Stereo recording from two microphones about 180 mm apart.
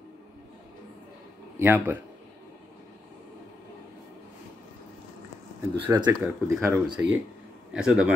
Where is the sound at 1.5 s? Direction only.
10° right (ahead or behind).